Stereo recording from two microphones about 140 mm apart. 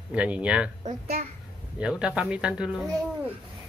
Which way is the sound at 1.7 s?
5° right (ahead or behind).